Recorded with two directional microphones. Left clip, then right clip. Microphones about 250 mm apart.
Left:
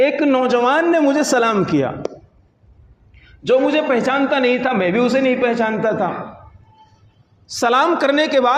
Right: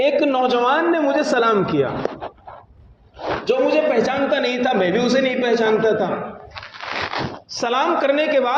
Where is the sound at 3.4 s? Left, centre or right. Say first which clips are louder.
Left 2 dB; left.